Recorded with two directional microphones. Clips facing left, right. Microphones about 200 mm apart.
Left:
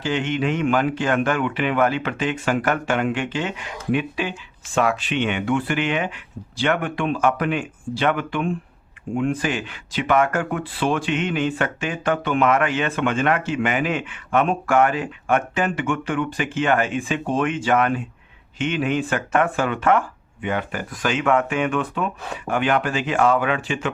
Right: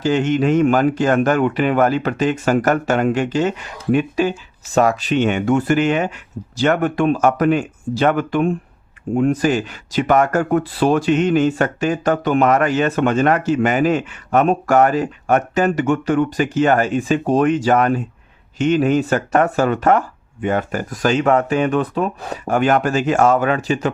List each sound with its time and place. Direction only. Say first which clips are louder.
0.0 s speech: right 6 dB; 40° right (ahead or behind)